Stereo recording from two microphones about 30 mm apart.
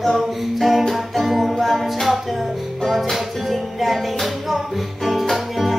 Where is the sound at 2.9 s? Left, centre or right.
Centre.